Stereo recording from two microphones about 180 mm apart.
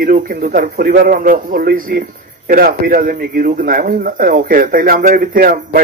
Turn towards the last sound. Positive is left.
turn(degrees=-55)  # may be behind; listen again after turning